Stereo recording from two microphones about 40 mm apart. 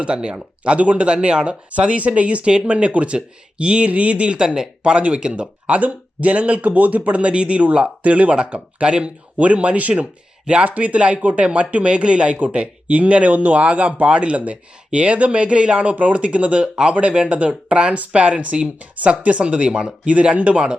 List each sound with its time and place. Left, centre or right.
0.0 s speech: right
1.7 s speech: right
4.8 s speech: right